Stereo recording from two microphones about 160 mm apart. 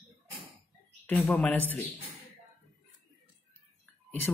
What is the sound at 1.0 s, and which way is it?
Speech, 10° left (ahead or behind).